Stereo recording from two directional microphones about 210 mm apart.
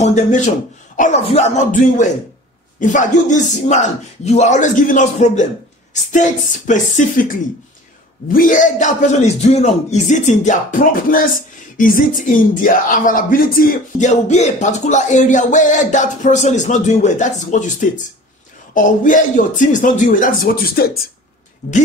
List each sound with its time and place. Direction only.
0.0 s speech: 35° left (ahead or behind)
21.6 s speech: 35° left (ahead or behind)